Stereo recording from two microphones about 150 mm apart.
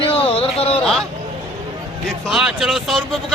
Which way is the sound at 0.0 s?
40° left (ahead or behind).